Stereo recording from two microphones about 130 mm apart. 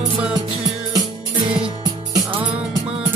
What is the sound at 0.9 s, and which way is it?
Music, 40° right (ahead or behind).